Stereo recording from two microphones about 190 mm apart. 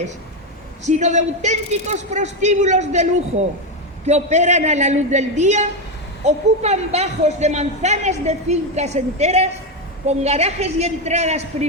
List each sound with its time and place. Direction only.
0.9 s speech: 40° right (ahead or behind)